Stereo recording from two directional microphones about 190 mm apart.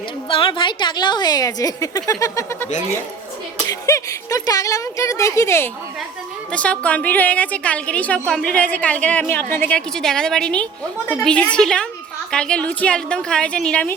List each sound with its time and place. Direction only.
0.3 s a woman's voice: 25° left (ahead or behind)
3.7 s a woman's voice: 15° left (ahead or behind)